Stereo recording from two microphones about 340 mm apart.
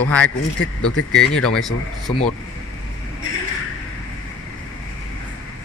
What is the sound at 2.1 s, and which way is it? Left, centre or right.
Speech, centre.